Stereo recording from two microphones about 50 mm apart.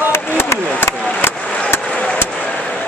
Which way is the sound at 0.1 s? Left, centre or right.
Left.